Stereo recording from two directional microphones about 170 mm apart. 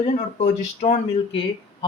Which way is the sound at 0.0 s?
40° left (ahead or behind).